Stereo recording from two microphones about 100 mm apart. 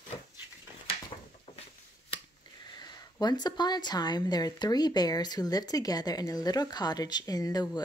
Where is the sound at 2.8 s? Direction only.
45° left (ahead or behind).